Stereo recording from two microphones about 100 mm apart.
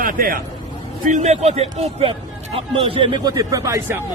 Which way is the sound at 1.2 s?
90° right.